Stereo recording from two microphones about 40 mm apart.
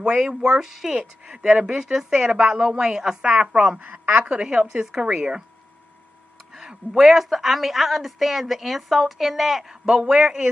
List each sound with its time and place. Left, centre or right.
0.2 s a man's voice: right
0.6 s a woman's voice: centre
6.5 s a sound: centre
7.1 s a woman's voice: centre
9.8 s a man's voice: right